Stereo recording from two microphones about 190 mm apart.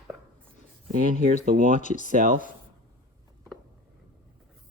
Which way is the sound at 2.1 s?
45° right (ahead or behind).